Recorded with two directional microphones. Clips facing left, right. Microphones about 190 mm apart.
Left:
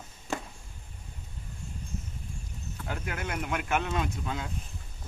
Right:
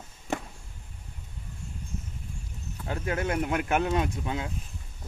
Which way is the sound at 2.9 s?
30° right (ahead or behind).